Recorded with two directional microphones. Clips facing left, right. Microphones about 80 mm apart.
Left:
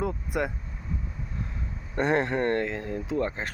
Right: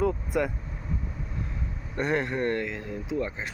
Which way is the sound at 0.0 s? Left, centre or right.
Left.